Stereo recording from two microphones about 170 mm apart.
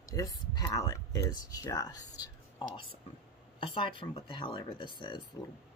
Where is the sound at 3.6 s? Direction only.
30° left (ahead or behind).